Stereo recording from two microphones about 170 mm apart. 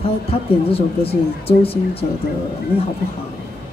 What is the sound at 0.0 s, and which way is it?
A woman's voice, 35° left (ahead or behind).